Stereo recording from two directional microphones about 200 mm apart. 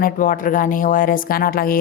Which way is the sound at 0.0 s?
40° left (ahead or behind).